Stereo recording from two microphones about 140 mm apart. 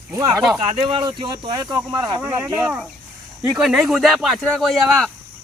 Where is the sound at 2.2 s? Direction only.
15° right (ahead or behind).